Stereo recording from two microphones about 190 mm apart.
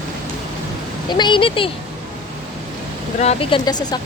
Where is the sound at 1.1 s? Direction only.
25° left (ahead or behind).